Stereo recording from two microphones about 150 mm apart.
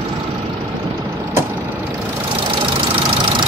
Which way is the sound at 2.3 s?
35° right (ahead or behind).